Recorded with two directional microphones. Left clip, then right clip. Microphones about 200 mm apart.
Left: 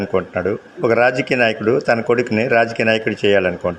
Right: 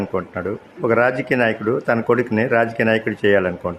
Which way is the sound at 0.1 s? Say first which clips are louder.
Left 5 dB; 10° left (ahead or behind).